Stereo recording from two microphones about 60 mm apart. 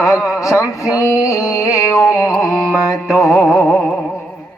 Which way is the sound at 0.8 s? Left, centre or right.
Left.